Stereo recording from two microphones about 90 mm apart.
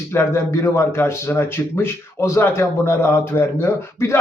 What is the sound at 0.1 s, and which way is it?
A man's voice, 30° left (ahead or behind).